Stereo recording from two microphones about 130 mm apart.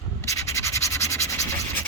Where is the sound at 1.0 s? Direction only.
20° left (ahead or behind).